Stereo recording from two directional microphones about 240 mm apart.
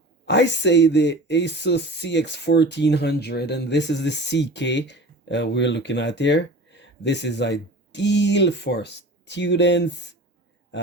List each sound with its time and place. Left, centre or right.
0.3 s speech: left